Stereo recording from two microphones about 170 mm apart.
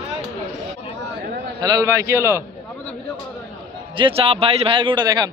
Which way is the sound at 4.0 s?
35° right (ahead or behind).